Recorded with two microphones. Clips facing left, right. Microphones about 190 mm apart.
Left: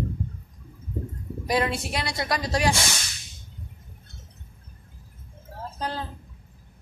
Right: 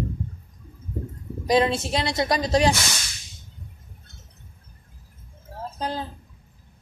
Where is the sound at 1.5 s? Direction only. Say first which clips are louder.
Right 5 dB; 25° right (ahead or behind).